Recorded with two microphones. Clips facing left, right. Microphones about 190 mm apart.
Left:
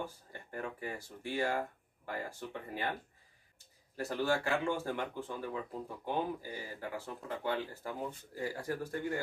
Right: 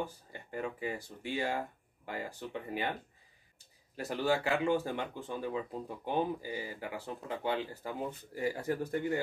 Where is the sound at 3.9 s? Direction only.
15° right (ahead or behind).